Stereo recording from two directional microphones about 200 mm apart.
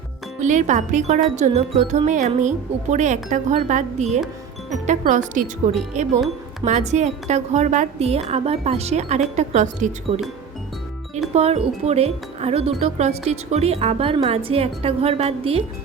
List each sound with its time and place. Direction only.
0.3 s speech: 35° right (ahead or behind)
11.3 s speech: 30° right (ahead or behind)